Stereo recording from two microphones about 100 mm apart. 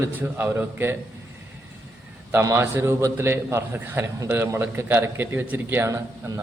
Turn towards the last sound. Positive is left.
turn(degrees=-25)  # may be behind; listen again after turning